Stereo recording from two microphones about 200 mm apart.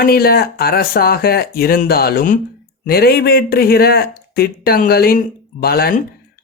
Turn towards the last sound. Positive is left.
turn(degrees=50)  # may be behind; listen again after turning